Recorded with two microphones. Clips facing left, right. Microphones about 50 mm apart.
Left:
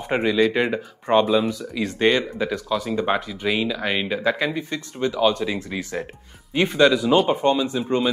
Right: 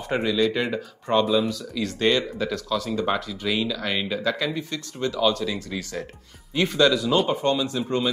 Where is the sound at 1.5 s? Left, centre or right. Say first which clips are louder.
Left 2 dB; left.